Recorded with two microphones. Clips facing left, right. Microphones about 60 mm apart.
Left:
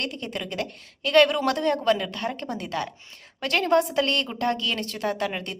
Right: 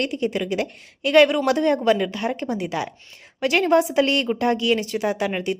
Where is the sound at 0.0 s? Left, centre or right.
Centre.